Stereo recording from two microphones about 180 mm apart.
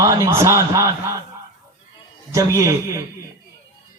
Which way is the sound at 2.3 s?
15° right (ahead or behind).